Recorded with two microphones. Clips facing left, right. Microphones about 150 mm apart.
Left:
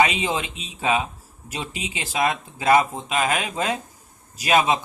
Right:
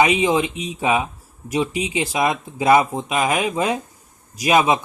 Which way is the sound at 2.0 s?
15° right (ahead or behind).